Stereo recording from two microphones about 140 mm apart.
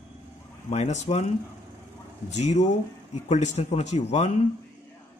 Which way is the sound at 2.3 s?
50° left (ahead or behind).